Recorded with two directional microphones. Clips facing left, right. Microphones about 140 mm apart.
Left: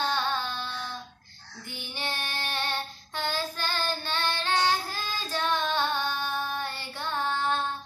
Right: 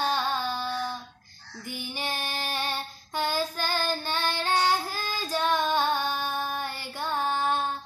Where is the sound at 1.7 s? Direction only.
10° right (ahead or behind).